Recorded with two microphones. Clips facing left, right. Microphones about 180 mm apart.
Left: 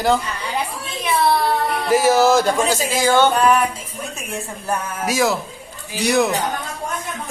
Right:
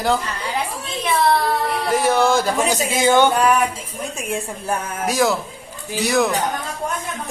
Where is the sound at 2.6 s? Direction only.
20° right (ahead or behind).